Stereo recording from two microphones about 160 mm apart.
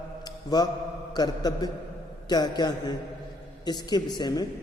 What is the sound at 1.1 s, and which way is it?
A man's voice, 25° left (ahead or behind).